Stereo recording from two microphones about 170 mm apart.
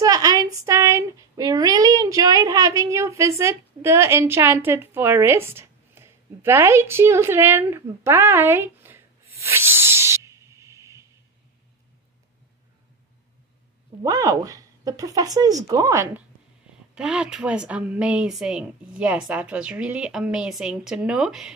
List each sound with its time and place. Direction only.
0.0 s a sound: 20° right (ahead or behind)
9.4 s snake: 15° right (ahead or behind)
14.0 s speech: 20° right (ahead or behind); by 21.5 s 5° right (ahead or behind)